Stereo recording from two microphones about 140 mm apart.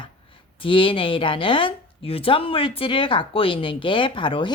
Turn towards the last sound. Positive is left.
turn(degrees=35)  # may be behind; listen again after turning